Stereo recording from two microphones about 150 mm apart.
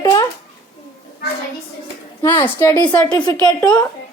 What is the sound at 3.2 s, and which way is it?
Speech, 30° left (ahead or behind).